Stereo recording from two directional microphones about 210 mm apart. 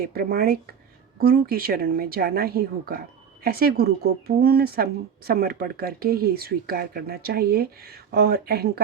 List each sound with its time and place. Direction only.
0.0 s speech: 45° right (ahead or behind)